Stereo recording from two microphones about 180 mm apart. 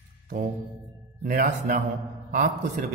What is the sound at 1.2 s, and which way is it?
A man's voice, 50° right (ahead or behind).